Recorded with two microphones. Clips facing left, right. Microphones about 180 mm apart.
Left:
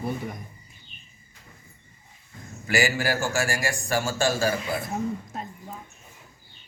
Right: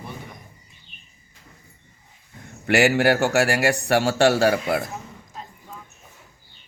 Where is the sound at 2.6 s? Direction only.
65° right (ahead or behind).